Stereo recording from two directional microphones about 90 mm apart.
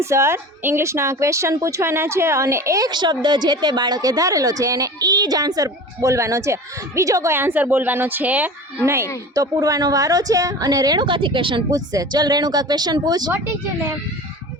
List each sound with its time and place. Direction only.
0.0 s speech: 30° right (ahead or behind)
2.9 s speech: 55° right (ahead or behind); by 7.3 s 35° right (ahead or behind)
7.3 s speech: 20° right (ahead or behind)
8.9 s a woman's voice: 35° right (ahead or behind)
11.0 s speech: 65° right (ahead or behind)
11.7 s a woman's voice: 45° right (ahead or behind)
13.3 s speech: 25° right (ahead or behind)